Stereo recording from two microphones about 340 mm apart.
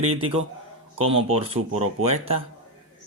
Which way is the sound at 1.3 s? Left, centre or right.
Centre.